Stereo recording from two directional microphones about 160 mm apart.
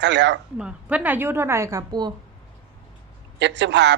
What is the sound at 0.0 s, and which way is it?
Speech, 90° right.